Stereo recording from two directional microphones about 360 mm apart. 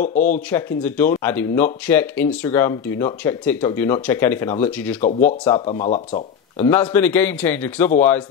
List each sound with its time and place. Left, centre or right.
0.0 s speech: left
0.5 s speech: centre
5.7 s speech: centre
6.6 s speech: centre